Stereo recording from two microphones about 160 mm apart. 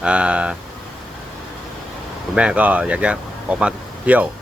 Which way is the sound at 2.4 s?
10° right (ahead or behind).